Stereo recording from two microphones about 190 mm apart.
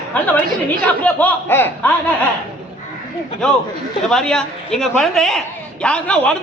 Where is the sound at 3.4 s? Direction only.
Centre (ahead or behind).